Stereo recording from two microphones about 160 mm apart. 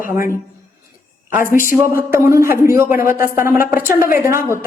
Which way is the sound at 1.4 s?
60° left (ahead or behind).